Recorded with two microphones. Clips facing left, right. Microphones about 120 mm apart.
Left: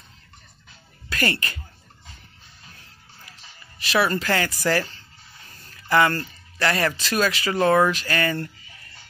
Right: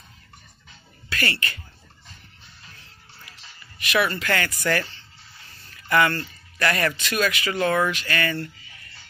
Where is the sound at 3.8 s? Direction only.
35° left (ahead or behind).